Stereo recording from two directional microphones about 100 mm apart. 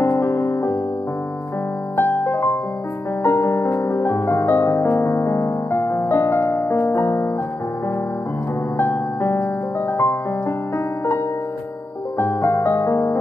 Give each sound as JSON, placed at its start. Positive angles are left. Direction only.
{"t": 0.0, "sound": "music", "side_deg": 30}
{"t": 2.0, "sound": "music", "side_deg": 20}
{"t": 8.7, "sound": "music", "side_deg": 20}
{"t": 12.2, "sound": "music", "side_deg": 25}